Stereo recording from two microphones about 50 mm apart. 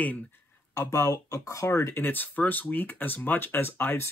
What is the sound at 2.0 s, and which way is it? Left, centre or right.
A man's voice, left.